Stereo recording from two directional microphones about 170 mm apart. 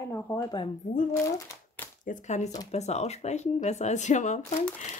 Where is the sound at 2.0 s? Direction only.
45° left (ahead or behind).